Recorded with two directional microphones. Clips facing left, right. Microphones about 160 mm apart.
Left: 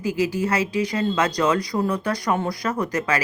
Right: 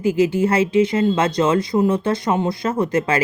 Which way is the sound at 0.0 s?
25° right (ahead or behind).